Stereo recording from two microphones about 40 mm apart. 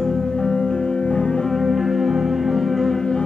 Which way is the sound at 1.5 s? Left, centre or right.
Centre.